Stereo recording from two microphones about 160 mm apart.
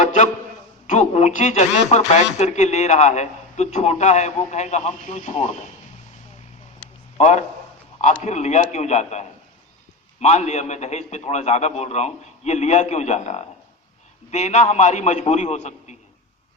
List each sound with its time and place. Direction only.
0.0 s a sound: 50° left (ahead or behind)
0.9 s speech: 50° left (ahead or behind)
7.2 s speech: 45° left (ahead or behind)